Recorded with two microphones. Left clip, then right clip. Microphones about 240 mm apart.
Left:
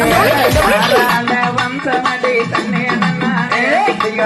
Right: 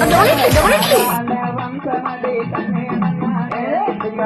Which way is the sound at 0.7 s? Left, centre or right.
Left.